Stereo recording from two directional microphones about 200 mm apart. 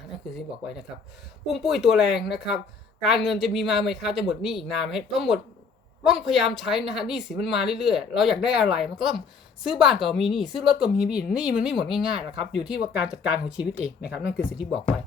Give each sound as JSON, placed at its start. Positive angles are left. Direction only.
{"t": 1.5, "sound": "a woman's voice", "side_deg": 0}